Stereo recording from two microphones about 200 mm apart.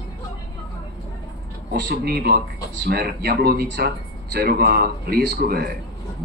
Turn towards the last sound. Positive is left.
turn(degrees=-50)  # may be behind; listen again after turning